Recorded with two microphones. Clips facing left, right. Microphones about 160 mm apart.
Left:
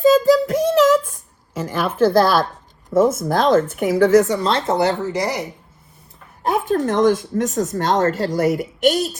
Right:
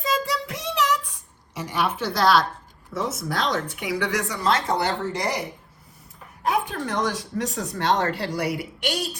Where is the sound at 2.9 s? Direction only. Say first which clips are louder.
Left 12 dB; 45° left (ahead or behind).